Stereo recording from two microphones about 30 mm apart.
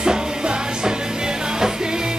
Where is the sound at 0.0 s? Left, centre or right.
Right.